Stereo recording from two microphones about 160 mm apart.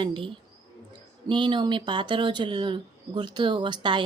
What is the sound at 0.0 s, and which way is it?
Speech, 30° right (ahead or behind).